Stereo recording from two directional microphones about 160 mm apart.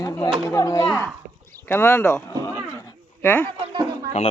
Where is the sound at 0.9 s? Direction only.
5° left (ahead or behind).